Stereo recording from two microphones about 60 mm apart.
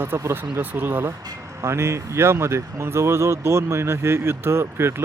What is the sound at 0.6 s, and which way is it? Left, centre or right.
Speech, right.